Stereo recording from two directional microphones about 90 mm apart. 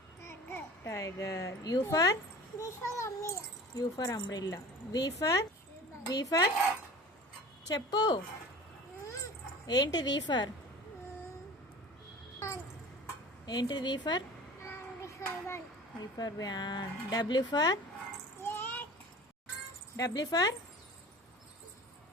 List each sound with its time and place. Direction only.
0.2 s a sound: 30° left (ahead or behind)
1.9 s speech: 40° left (ahead or behind)
7.7 s speech: 45° left (ahead or behind)
9.6 s speech: 50° left (ahead or behind)
13.4 s speech: 50° left (ahead or behind)
14.6 s child singing: 30° left (ahead or behind)
16.1 s speech: 45° left (ahead or behind)
18.4 s a sound: 25° left (ahead or behind)
20.0 s speech: 40° left (ahead or behind)